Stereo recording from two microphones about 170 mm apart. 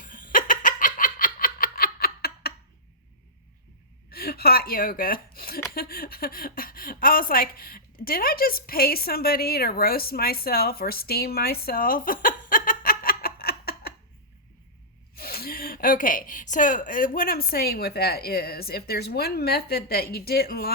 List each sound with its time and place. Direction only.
0.0 s a sound: 55° left (ahead or behind)
4.1 s gasp: 65° left (ahead or behind)
5.7 s a woman's voice: 65° left (ahead or behind)
15.1 s speech: 65° left (ahead or behind)